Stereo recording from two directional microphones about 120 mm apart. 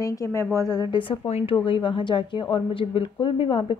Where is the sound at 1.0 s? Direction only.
50° left (ahead or behind).